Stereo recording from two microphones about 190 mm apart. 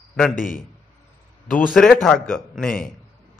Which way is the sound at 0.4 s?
45° left (ahead or behind).